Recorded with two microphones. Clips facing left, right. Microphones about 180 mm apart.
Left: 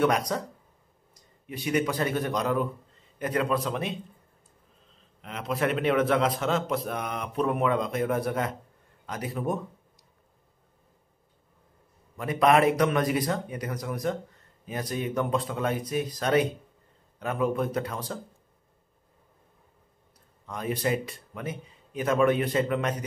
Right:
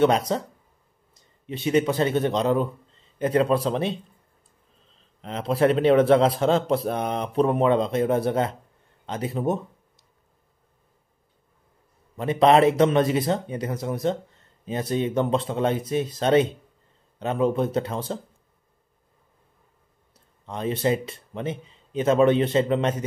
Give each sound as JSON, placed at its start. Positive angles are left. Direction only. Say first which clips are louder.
{"t": 0.0, "sound": "speech", "louder": "right 4 dB", "side_deg": -25}
{"t": 5.2, "sound": "speech", "louder": "right 7 dB", "side_deg": -30}
{"t": 12.2, "sound": "speech", "louder": "right 4 dB", "side_deg": -25}
{"t": 20.4, "sound": "speech", "louder": "right 5 dB", "side_deg": -25}